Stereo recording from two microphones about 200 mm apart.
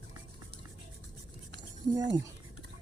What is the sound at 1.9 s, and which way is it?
Speech, 20° right (ahead or behind).